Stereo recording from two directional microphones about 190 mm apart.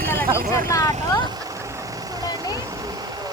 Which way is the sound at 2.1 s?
20° right (ahead or behind).